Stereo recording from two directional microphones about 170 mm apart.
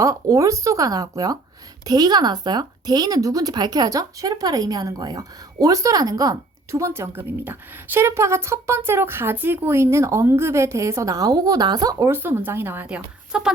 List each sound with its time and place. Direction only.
0.0 s speech: 20° right (ahead or behind)